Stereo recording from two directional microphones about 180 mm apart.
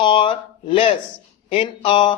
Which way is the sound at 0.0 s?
25° left (ahead or behind).